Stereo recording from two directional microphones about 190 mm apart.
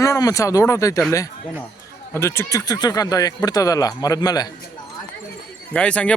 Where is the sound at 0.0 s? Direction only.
20° left (ahead or behind).